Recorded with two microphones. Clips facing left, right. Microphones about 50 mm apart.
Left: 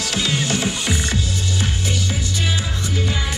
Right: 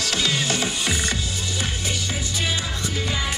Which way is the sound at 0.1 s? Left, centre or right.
Left.